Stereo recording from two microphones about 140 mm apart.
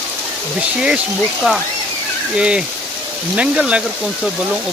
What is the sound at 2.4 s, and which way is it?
Speech, 5° right (ahead or behind).